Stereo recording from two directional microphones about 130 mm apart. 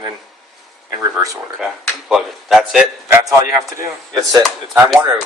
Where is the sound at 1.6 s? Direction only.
Centre (ahead or behind).